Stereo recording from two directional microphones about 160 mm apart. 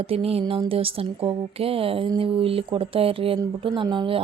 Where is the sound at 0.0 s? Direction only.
35° right (ahead or behind).